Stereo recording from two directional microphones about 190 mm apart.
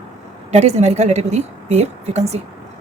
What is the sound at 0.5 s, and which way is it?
A woman's voice, 35° right (ahead or behind).